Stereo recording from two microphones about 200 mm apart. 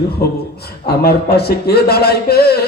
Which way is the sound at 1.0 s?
50° left (ahead or behind).